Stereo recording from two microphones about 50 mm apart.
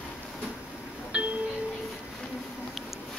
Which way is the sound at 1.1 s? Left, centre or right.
Right.